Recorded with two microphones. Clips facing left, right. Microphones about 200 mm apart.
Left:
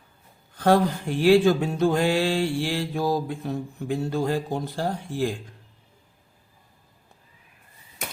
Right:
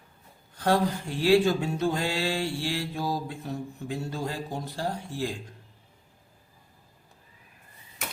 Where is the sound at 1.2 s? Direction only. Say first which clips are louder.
Left 4 dB; 55° left (ahead or behind).